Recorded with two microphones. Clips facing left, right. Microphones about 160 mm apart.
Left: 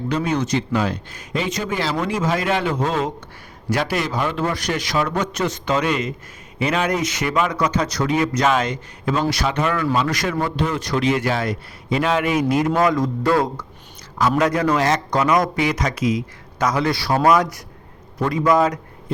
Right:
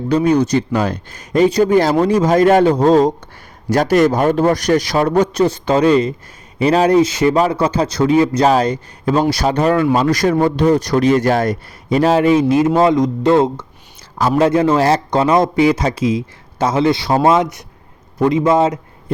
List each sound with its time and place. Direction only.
0.1 s a man's voice: 35° right (ahead or behind)